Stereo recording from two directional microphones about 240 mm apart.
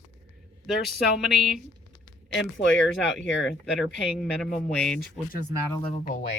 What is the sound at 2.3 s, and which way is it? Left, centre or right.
Speech, left.